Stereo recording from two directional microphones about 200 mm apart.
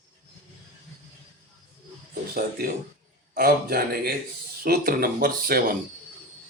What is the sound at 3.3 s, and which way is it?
Speech, 50° right (ahead or behind).